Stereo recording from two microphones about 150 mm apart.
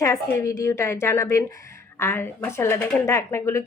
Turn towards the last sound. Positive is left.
turn(degrees=20)  # may be behind; listen again after turning